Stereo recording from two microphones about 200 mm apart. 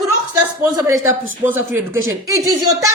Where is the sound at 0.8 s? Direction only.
15° right (ahead or behind).